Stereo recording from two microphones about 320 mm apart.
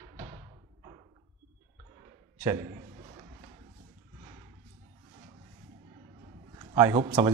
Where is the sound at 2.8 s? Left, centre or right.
Centre.